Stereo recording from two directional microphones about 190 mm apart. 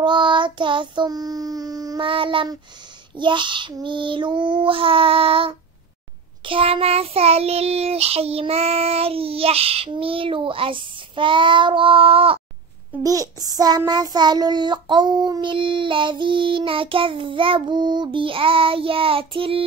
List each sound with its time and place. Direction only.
0.0 s child singing: 25° right (ahead or behind)
13.0 s child singing: 20° right (ahead or behind)